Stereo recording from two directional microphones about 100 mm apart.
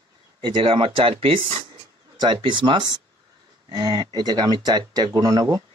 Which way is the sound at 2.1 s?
50° right (ahead or behind).